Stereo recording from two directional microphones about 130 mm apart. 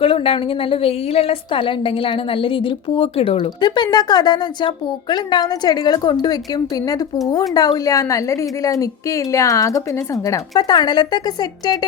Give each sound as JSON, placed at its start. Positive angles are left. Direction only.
{"t": 0.0, "sound": "a woman's voice", "side_deg": 45}